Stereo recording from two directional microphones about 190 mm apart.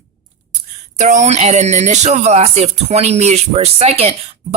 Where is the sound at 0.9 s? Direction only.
40° right (ahead or behind).